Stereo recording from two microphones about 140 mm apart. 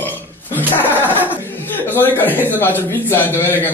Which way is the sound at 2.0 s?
15° left (ahead or behind).